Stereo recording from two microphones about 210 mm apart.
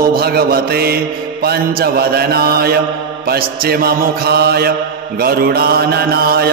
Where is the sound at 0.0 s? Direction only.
45° right (ahead or behind).